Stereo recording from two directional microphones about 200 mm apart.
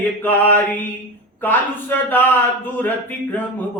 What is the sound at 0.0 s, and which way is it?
Speech, 10° left (ahead or behind).